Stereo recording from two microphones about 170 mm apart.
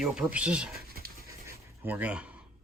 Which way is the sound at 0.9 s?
60° right (ahead or behind).